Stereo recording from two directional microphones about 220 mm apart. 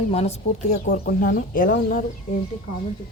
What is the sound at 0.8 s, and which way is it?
Speech, 40° left (ahead or behind).